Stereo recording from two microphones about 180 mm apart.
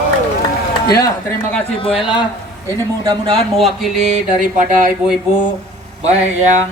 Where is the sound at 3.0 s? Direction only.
20° right (ahead or behind).